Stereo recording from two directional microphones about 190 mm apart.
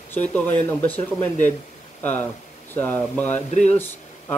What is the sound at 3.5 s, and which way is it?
Speech, 35° left (ahead or behind).